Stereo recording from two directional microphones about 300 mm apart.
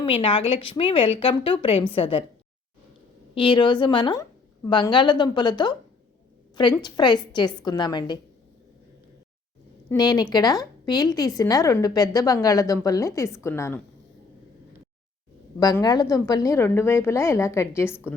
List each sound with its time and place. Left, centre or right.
0.0 s a woman's voice: centre
3.3 s a woman's voice: centre
9.9 s a woman's voice: centre
15.6 s a woman's voice: centre